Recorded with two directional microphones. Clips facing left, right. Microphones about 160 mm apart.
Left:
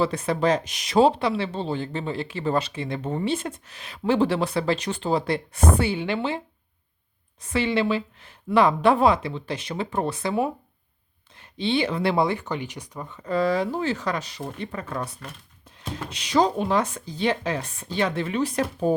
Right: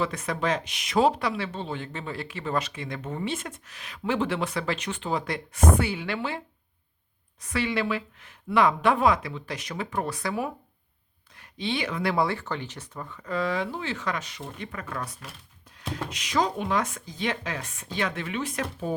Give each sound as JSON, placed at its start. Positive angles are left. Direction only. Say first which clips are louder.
{"t": 0.0, "sound": "speech", "louder": "left 5 dB", "side_deg": 30}
{"t": 7.4, "sound": "speech", "louder": "left 4 dB", "side_deg": 25}
{"t": 13.2, "sound": "speech", "louder": "left 5 dB", "side_deg": 35}